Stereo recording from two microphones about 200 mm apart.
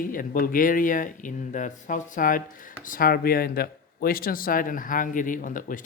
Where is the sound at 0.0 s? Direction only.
45° left (ahead or behind).